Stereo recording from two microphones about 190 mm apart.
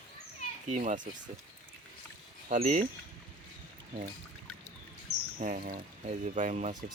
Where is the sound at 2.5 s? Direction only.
40° right (ahead or behind).